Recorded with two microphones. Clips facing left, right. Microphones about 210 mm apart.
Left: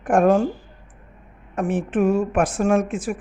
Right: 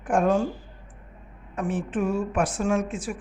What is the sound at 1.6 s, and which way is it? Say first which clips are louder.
Speech: left 4 dB; 90° left.